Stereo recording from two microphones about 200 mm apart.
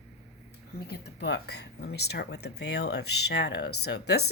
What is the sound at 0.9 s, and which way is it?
Speech, 55° left (ahead or behind).